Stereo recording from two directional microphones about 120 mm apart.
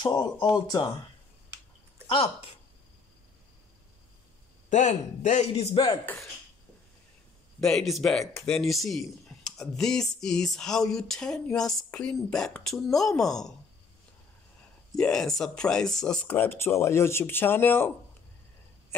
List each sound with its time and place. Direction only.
0.0 s speech: 40° left (ahead or behind)
2.0 s speech: 45° left (ahead or behind)
4.6 s a man's voice: 90° left
7.6 s speech: centre (ahead or behind)
15.0 s speech: 5° left (ahead or behind)